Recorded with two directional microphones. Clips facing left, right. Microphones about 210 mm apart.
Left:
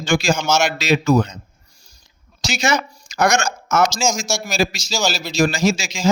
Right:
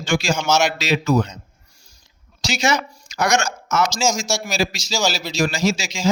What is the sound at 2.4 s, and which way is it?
A man's voice, 45° left (ahead or behind).